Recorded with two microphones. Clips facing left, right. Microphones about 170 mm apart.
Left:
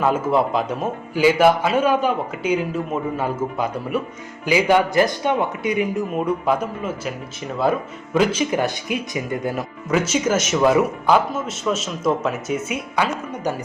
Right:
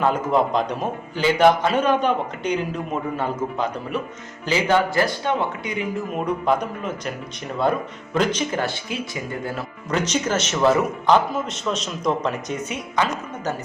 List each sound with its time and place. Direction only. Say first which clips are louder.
0.0 s a man's voice: left 1 dB; 5° left (ahead or behind)
9.9 s a man's voice: left 3 dB; 5° left (ahead or behind)